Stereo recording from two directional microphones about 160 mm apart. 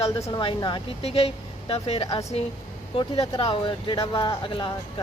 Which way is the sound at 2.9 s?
40° left (ahead or behind).